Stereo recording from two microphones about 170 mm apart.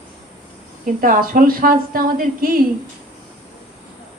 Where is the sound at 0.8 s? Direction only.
55° right (ahead or behind).